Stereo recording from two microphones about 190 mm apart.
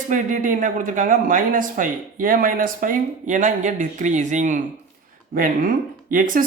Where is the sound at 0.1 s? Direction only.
40° right (ahead or behind).